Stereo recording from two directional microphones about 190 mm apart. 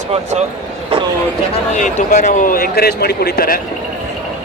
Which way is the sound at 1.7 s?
40° left (ahead or behind).